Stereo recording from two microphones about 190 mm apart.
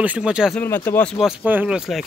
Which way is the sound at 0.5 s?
10° left (ahead or behind).